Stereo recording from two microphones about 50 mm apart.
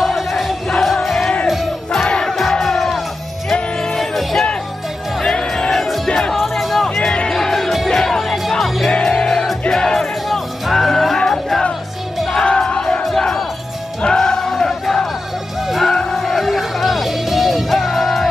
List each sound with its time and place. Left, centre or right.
0.0 s music: centre
1.5 s battle cry: centre
2.2 s music: centre
5.2 s music: centre
6.3 s music: centre
7.0 s music: centre
8.9 s music: centre
12.4 s battle cry: centre
15.7 s music: centre